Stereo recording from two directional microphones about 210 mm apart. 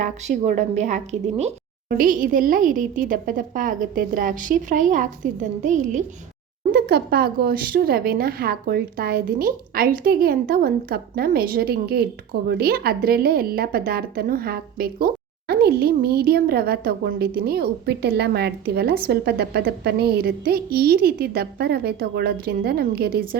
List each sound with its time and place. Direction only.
0.0 s a woman's voice: 35° right (ahead or behind)
6.7 s speech: 45° right (ahead or behind)